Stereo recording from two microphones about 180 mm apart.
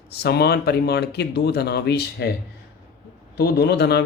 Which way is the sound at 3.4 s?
65° left (ahead or behind).